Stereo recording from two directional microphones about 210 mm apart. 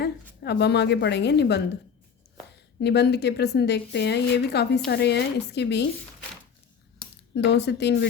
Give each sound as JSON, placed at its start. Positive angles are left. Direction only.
{"t": 0.0, "sound": "a woman's voice", "side_deg": 55}
{"t": 2.8, "sound": "a woman's voice", "side_deg": 55}
{"t": 7.3, "sound": "speech", "side_deg": 55}